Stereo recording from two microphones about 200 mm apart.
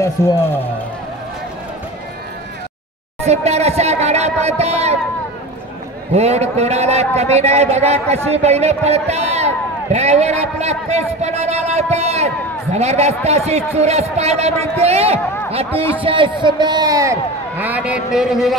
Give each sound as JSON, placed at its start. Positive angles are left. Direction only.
{"t": 3.3, "sound": "a man's voice", "side_deg": -30}
{"t": 6.1, "sound": "a man's voice", "side_deg": -35}